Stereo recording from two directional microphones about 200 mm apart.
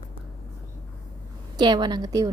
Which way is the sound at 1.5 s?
20° right (ahead or behind).